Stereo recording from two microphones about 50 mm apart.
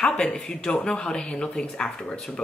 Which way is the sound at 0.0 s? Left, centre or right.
Centre.